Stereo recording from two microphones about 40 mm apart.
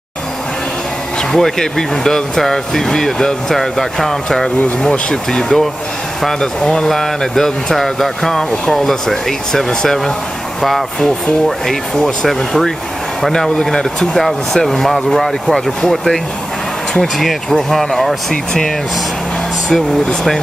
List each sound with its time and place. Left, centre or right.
1.3 s speech: centre
18.3 s speech: centre
19.7 s speech: centre